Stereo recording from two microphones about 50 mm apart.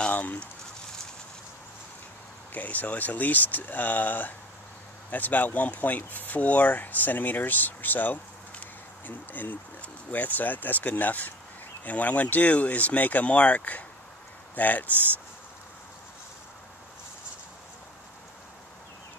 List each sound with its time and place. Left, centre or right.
0.1 s speech: left
2.5 s speech: left